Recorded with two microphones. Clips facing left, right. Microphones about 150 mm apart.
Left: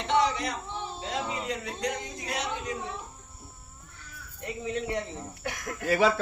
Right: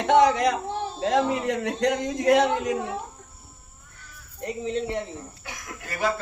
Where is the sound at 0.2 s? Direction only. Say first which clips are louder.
Right 8 dB; 80° right.